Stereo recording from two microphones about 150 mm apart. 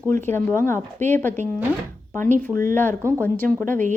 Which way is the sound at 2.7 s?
15° left (ahead or behind).